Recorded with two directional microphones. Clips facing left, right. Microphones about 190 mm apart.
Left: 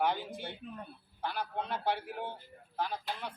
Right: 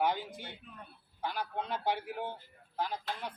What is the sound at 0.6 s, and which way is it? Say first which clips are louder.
Speech: left 9 dB; 40° left (ahead or behind).